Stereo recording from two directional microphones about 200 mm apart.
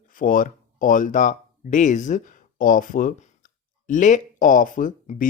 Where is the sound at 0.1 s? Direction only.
45° left (ahead or behind).